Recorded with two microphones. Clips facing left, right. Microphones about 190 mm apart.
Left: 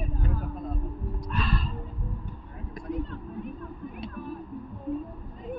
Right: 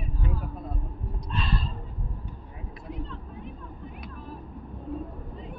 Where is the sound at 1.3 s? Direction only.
25° right (ahead or behind).